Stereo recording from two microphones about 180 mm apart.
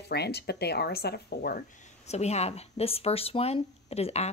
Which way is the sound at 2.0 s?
35° left (ahead or behind).